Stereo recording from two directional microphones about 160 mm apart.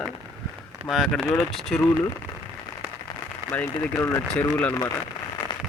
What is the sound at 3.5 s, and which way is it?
Speech, 10° left (ahead or behind).